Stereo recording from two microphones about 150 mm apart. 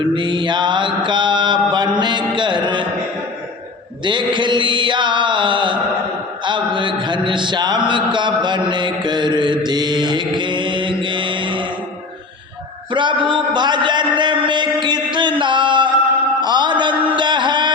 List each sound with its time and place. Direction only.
0.0 s mantra: 35° right (ahead or behind)
1.7 s music: 30° right (ahead or behind)
4.0 s mantra: 30° right (ahead or behind)
6.7 s mantra: 30° right (ahead or behind)
12.9 s a sound: 30° right (ahead or behind)